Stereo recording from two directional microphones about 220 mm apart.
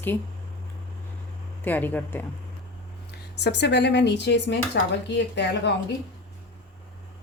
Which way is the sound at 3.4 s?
50° left (ahead or behind).